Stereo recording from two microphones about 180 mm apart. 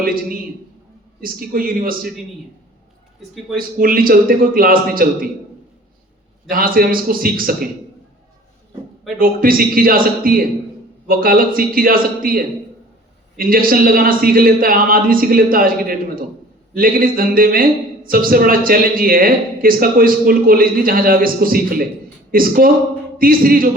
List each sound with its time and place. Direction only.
0.0 s a man's voice: 55° right (ahead or behind)
3.6 s a man's voice: 55° right (ahead or behind)
6.5 s a man's voice: 55° right (ahead or behind)
9.1 s a man's voice: 50° right (ahead or behind)